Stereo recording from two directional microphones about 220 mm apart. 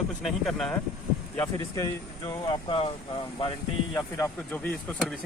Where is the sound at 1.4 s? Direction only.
15° left (ahead or behind).